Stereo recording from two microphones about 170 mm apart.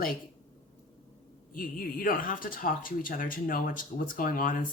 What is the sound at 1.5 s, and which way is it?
Speech, 55° left (ahead or behind).